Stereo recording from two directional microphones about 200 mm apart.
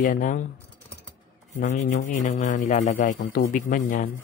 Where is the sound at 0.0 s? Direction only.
40° left (ahead or behind).